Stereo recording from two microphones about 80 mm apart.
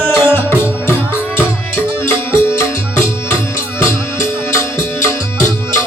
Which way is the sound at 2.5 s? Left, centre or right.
Left.